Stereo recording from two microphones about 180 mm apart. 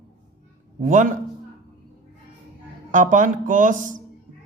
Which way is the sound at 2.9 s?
45° right (ahead or behind).